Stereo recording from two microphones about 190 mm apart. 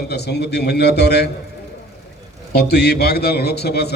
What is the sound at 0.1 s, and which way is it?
A man's voice, 60° left (ahead or behind).